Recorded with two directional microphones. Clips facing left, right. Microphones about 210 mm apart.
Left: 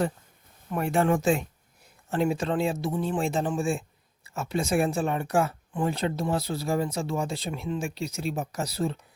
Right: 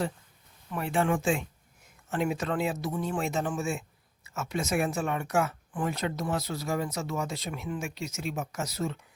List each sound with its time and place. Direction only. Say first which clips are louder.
0.7 s speech: left 4 dB; 45° left (ahead or behind)